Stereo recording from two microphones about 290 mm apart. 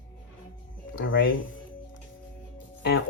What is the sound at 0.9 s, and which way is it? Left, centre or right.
Speech, left.